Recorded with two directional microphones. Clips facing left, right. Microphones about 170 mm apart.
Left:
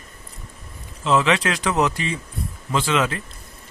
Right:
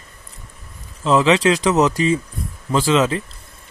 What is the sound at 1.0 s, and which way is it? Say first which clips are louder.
Speech: right 5 dB; 30° right (ahead or behind).